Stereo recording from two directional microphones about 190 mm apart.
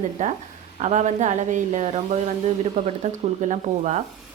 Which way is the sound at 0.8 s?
40° right (ahead or behind).